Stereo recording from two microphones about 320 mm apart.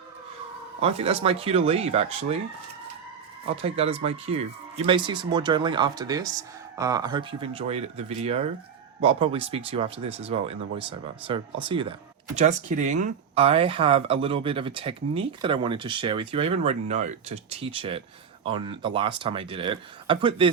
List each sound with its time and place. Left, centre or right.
0.8 s speech: centre
3.4 s speech: centre